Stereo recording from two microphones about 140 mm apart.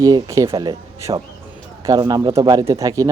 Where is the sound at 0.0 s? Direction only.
25° right (ahead or behind).